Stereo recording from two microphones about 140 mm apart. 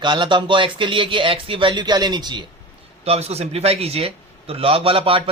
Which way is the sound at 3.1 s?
50° right (ahead or behind).